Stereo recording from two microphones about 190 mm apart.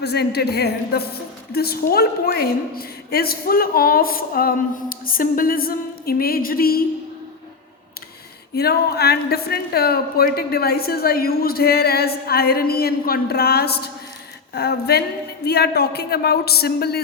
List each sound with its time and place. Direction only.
0.0 s a woman's voice: 60° left (ahead or behind)
8.5 s speech: 55° left (ahead or behind)